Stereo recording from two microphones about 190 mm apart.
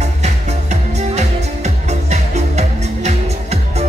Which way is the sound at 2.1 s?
35° right (ahead or behind).